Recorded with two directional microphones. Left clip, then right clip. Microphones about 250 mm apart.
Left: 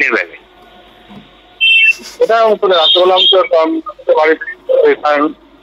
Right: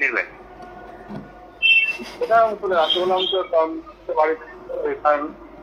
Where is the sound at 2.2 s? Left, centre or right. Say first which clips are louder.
Left 8 dB; left.